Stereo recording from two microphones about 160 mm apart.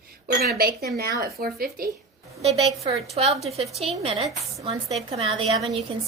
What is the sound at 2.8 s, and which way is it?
A woman's voice, 40° right (ahead or behind).